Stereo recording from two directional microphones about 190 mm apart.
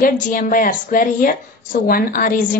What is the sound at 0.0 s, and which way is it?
A woman's voice, 45° left (ahead or behind).